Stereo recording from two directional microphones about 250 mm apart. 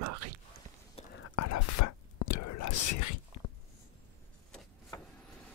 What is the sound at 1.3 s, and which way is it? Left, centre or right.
Whispering, left.